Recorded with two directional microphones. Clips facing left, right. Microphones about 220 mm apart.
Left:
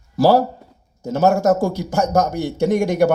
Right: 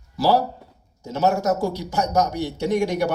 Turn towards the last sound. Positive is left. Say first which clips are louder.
# left 5 dB
turn(degrees=50)  # may be behind; listen again after turning